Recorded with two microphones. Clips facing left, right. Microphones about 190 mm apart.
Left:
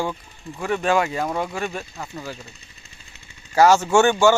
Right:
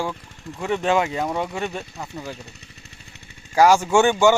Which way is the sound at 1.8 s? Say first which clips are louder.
Even; centre (ahead or behind).